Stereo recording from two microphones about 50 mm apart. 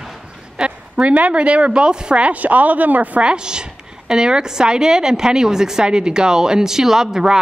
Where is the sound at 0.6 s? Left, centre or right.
Right.